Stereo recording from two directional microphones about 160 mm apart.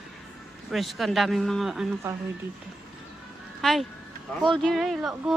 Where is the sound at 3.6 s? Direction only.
Centre (ahead or behind).